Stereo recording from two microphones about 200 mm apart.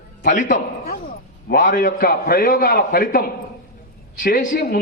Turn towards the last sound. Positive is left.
turn(degrees=50)  # may be behind; listen again after turning